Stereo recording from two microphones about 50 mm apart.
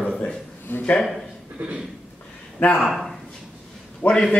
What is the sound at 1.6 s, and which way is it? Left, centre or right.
Speech, right.